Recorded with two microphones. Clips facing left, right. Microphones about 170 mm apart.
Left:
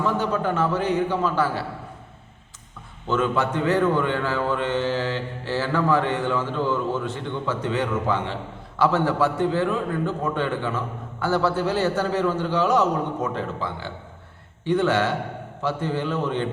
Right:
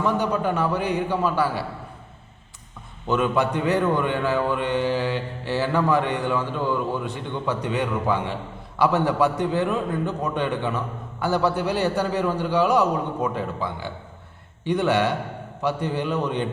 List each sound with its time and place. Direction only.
0.0 s a man's voice: 15° right (ahead or behind)
3.1 s a man's voice: 15° right (ahead or behind)